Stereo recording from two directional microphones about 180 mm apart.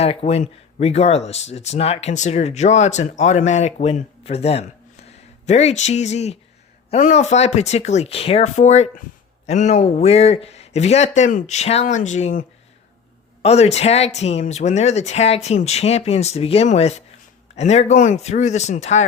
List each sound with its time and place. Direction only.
0.0 s speech: 35° left (ahead or behind)